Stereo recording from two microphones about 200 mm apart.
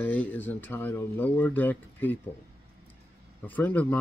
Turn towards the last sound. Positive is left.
turn(degrees=5)  # may be behind; listen again after turning